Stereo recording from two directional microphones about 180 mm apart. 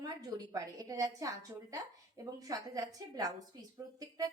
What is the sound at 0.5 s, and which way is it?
A woman's voice, 20° right (ahead or behind).